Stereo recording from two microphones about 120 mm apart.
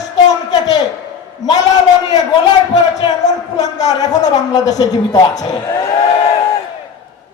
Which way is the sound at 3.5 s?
30° left (ahead or behind).